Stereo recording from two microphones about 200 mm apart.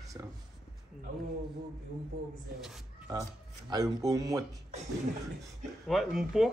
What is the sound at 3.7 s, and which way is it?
Speech, 20° right (ahead or behind).